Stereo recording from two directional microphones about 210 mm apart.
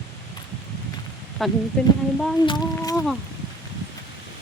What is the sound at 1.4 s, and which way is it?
Speech, centre (ahead or behind).